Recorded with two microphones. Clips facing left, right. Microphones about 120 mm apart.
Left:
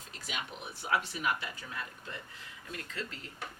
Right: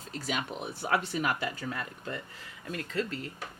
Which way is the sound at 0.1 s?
40° right (ahead or behind).